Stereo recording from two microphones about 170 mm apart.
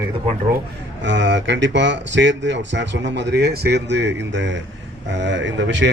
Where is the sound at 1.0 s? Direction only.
90° right.